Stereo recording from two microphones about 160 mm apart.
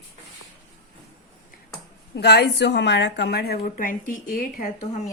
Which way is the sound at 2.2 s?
90° left.